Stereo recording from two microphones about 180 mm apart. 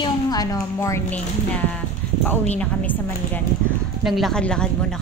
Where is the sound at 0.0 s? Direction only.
20° left (ahead or behind).